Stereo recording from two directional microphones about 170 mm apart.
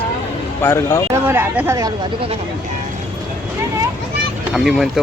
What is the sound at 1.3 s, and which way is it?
Speech, 15° right (ahead or behind).